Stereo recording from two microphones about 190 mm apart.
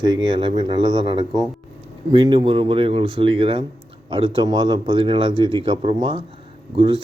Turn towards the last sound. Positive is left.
turn(degrees=-25)  # may be behind; listen again after turning